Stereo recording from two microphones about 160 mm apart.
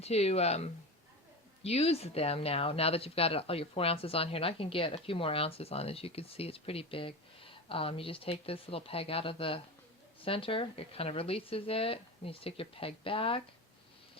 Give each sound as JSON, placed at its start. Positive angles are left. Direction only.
{"t": 0.0, "sound": "speech", "side_deg": 40}